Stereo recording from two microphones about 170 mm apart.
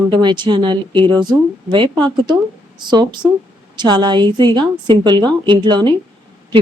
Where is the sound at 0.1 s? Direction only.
25° right (ahead or behind).